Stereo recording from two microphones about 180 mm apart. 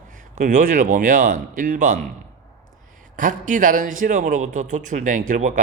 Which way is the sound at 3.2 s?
45° right (ahead or behind).